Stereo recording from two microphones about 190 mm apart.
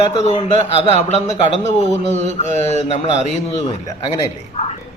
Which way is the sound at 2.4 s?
40° left (ahead or behind).